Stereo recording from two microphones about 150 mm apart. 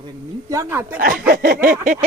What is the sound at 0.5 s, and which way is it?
Speech, 20° right (ahead or behind).